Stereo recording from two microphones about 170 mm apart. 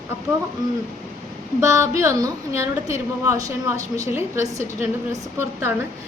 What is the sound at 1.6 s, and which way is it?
A woman's voice, 15° right (ahead or behind).